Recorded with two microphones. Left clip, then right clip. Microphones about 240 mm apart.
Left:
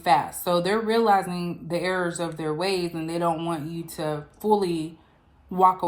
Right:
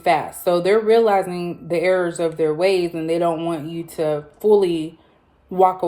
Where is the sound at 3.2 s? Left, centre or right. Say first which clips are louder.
Right 5 dB; centre.